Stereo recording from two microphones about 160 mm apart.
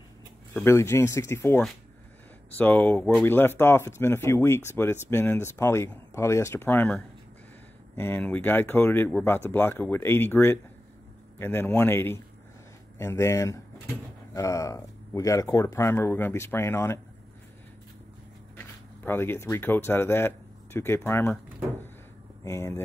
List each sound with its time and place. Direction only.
0.7 s speech: 15° left (ahead or behind)
19.0 s speech: 15° left (ahead or behind)
22.4 s speech: 15° left (ahead or behind)